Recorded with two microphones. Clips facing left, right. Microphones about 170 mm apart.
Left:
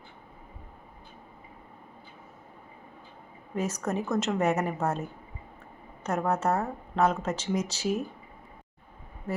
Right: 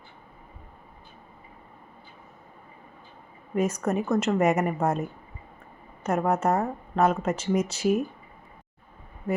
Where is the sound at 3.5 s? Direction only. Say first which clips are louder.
Right 5 dB; 10° right (ahead or behind).